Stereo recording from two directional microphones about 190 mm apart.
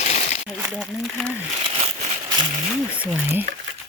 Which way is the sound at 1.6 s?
30° right (ahead or behind).